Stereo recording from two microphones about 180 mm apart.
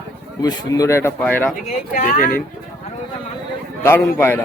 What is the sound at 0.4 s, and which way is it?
Speech, 15° left (ahead or behind).